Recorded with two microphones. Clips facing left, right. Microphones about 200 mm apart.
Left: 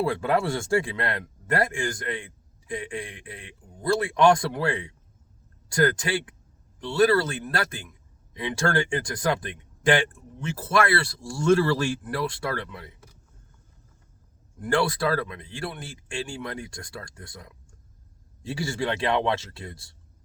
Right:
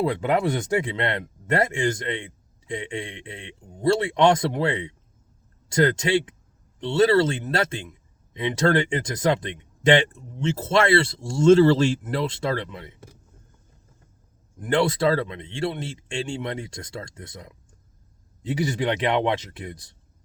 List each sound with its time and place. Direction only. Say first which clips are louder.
0.0 s speech: right 2 dB; 20° right (ahead or behind)
14.6 s speech: right 3 dB; 20° right (ahead or behind)